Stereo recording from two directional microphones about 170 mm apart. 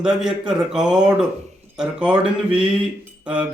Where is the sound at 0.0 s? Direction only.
5° right (ahead or behind).